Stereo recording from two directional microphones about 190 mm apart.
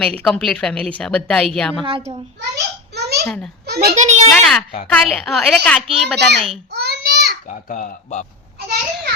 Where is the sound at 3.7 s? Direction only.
55° right (ahead or behind).